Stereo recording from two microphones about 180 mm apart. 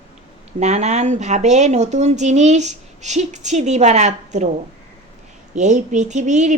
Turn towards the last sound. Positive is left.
turn(degrees=-40)  # may be behind; listen again after turning